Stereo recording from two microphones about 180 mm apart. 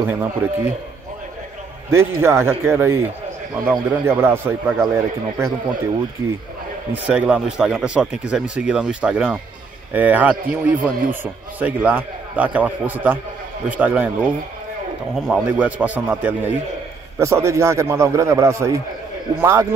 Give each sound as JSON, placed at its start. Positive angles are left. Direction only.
{"t": 0.0, "sound": "a man's voice", "side_deg": -10}
{"t": 1.9, "sound": "a man's voice", "side_deg": -15}
{"t": 6.9, "sound": "a man's voice", "side_deg": -5}